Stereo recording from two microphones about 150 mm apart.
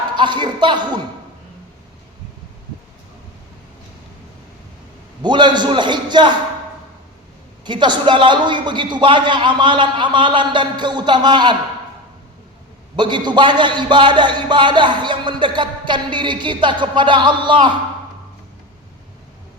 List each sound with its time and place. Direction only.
0.2 s a man's voice: 30° right (ahead or behind)
5.2 s a man's voice: 30° right (ahead or behind)
7.6 s a man's voice: 30° right (ahead or behind)
13.0 s a man's voice: 30° right (ahead or behind)